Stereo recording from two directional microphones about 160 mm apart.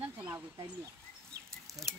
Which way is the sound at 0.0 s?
15° right (ahead or behind).